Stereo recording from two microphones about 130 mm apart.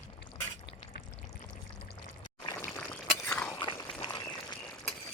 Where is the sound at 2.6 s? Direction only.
15° left (ahead or behind).